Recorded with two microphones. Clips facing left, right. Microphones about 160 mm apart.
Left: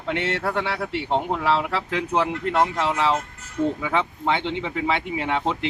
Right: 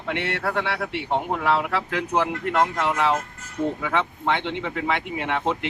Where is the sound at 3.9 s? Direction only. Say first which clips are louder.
Left 1 dB; 5° left (ahead or behind).